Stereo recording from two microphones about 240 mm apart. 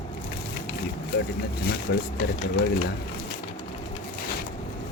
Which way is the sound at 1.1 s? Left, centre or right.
Left.